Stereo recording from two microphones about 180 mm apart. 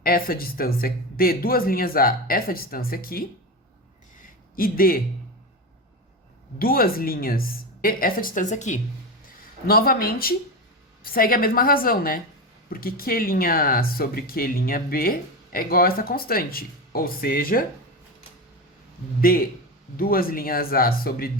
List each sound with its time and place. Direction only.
0.0 s speech: 55° left (ahead or behind)
4.2 s a sound: 55° left (ahead or behind)
6.6 s a woman's voice: 55° left (ahead or behind)
9.2 s a woman's voice: 55° left (ahead or behind)
19.2 s speech: 55° left (ahead or behind)